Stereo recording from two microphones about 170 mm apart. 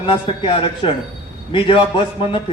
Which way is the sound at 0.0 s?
30° left (ahead or behind).